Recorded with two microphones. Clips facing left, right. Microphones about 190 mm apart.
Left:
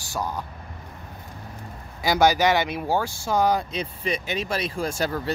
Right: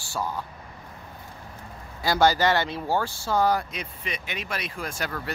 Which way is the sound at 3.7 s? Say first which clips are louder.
Left 7 dB; 35° left (ahead or behind).